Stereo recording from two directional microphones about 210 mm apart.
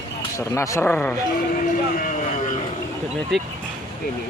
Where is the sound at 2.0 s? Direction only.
40° left (ahead or behind).